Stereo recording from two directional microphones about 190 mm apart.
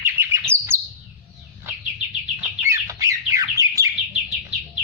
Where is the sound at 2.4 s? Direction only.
15° right (ahead or behind).